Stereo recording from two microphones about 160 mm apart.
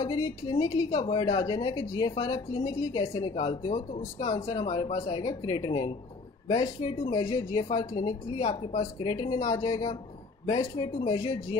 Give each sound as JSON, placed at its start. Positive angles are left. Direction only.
{"t": 0.0, "sound": "a woman's voice", "side_deg": 25}
{"t": 2.9, "sound": "a woman's voice", "side_deg": 35}